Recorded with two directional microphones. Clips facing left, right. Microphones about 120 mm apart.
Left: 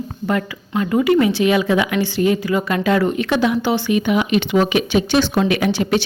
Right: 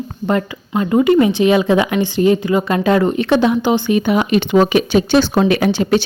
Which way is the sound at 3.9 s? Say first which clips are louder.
Even; 35° right (ahead or behind).